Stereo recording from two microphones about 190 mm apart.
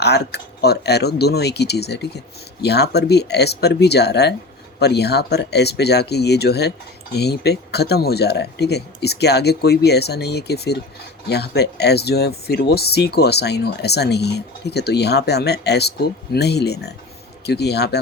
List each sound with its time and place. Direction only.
0.0 s speech: 60° left (ahead or behind)